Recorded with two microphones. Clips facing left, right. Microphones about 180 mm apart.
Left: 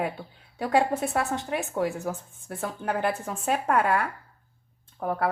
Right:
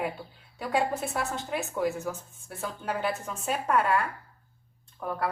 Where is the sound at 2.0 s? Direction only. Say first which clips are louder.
Left 3 dB; 45° left (ahead or behind).